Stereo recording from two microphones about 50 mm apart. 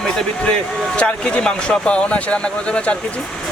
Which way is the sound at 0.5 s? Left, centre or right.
Centre.